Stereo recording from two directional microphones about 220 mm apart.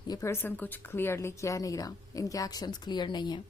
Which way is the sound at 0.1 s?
10° left (ahead or behind).